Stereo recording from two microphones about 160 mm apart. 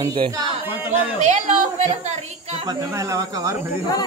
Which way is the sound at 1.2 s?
45° right (ahead or behind).